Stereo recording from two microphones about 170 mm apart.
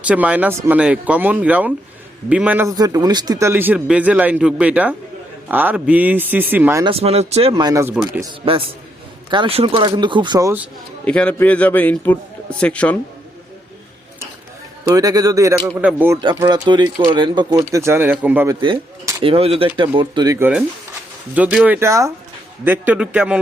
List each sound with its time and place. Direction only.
0.0 s speech: 10° right (ahead or behind)
2.6 s speech: 20° right (ahead or behind)
6.8 s speech: 35° right (ahead or behind)
7.5 s speech: 20° right (ahead or behind)
8.4 s speech: 35° right (ahead or behind)
11.0 s a man's voice: 5° left (ahead or behind)
14.8 s speech: 20° right (ahead or behind)
15.8 s speech: 10° right (ahead or behind)
16.3 s speech: 25° right (ahead or behind)
17.7 s speech: 15° right (ahead or behind)
18.4 s speech: 25° right (ahead or behind)
21.3 s speech: 10° right (ahead or behind)